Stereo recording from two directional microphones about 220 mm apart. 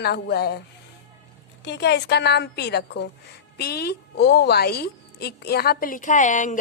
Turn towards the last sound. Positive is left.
turn(degrees=35)  # may be behind; listen again after turning